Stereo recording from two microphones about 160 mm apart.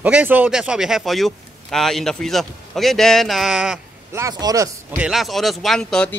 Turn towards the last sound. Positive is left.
turn(degrees=5)  # may be behind; listen again after turning